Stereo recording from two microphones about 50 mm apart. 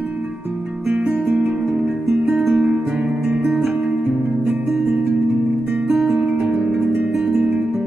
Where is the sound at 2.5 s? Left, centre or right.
Right.